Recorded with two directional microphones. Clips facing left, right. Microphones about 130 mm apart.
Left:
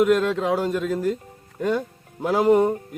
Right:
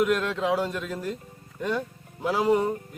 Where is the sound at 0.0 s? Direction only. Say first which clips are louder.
Left 5 dB; 45° left (ahead or behind).